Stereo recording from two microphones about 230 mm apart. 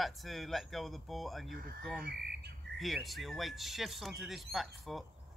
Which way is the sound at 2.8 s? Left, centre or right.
Centre.